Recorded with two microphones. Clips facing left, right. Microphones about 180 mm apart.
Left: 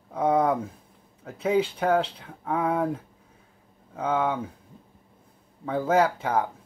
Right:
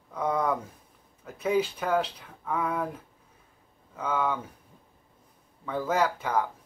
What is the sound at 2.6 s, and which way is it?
Speech, 30° left (ahead or behind).